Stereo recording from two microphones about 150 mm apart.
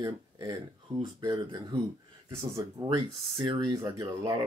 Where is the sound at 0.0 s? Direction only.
25° right (ahead or behind).